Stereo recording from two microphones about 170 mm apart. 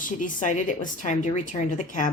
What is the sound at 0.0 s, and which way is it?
Speech, 50° left (ahead or behind).